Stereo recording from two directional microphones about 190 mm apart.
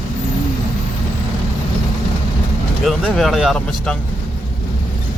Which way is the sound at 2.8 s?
Centre (ahead or behind).